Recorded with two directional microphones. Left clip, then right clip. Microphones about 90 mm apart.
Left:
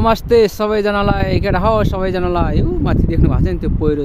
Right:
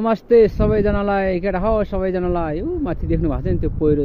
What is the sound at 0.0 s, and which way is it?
Speech, 35° left (ahead or behind).